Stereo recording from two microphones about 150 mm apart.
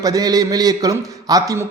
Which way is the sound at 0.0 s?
25° right (ahead or behind).